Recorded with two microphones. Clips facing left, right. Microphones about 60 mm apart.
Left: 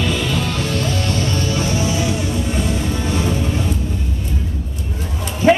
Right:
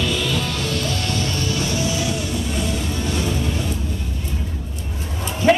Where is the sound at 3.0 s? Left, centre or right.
Left.